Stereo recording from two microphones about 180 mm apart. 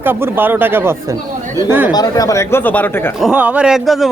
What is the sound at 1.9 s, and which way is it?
Speech, 20° left (ahead or behind).